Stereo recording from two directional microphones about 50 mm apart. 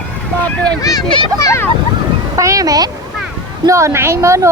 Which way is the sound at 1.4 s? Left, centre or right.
Left.